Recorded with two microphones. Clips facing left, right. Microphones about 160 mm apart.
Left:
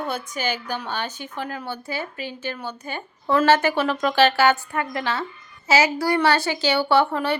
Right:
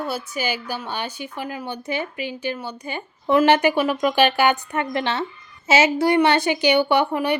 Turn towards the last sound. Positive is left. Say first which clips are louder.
# even
turn(degrees=-15)  # may be behind; listen again after turning